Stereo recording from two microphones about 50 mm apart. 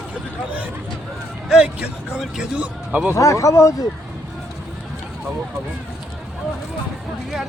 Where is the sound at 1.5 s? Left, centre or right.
Centre.